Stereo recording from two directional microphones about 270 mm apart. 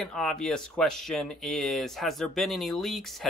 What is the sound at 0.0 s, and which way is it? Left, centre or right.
Speech, centre.